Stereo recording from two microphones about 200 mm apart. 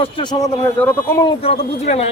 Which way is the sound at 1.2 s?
30° left (ahead or behind).